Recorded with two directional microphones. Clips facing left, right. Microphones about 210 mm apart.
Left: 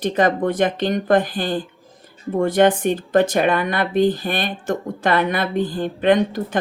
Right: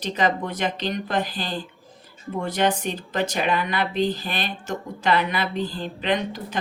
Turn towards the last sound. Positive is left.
turn(degrees=50)  # may be behind; listen again after turning